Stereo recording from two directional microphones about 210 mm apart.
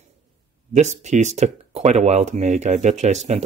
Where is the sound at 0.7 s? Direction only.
35° right (ahead or behind).